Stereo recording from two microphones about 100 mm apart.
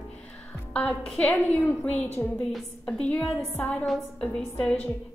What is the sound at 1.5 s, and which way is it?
A woman's voice, 20° left (ahead or behind).